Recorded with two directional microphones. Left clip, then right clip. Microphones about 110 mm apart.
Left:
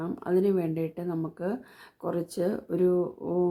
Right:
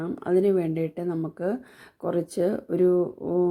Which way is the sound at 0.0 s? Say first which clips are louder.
Right 3 dB; 25° right (ahead or behind).